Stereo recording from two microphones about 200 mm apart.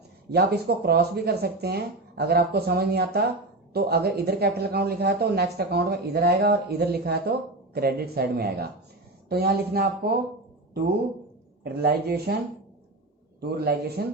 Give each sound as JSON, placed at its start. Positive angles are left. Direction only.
{"t": 0.3, "sound": "speech", "side_deg": -55}
{"t": 11.6, "sound": "speech", "side_deg": -50}
{"t": 13.4, "sound": "speech", "side_deg": -50}